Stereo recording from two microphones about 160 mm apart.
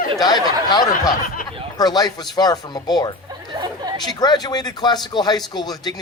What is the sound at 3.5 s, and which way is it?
Chatter, 25° right (ahead or behind).